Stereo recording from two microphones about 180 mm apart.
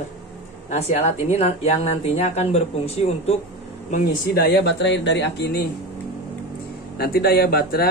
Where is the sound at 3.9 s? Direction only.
55° left (ahead or behind).